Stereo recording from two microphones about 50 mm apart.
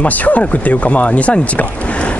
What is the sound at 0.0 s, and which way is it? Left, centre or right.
Speech, left.